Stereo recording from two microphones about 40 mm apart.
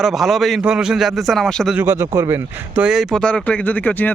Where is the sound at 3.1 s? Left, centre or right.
Left.